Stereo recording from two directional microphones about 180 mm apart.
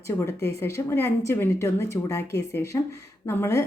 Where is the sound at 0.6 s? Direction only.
15° left (ahead or behind).